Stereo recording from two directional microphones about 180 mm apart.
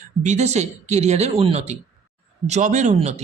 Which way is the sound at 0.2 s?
40° right (ahead or behind).